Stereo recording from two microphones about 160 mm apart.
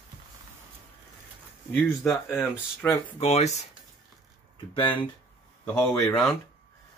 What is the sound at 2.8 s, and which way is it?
Speech, 10° left (ahead or behind).